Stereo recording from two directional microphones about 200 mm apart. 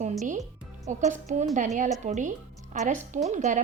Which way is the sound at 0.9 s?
35° right (ahead or behind).